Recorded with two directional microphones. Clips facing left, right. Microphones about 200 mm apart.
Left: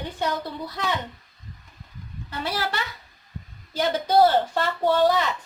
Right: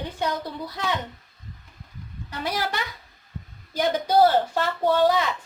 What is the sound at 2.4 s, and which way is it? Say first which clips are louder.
A woman's voice: right 1 dB; 15° right (ahead or behind).